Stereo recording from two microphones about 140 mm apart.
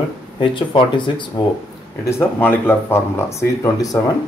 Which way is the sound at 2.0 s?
20° left (ahead or behind).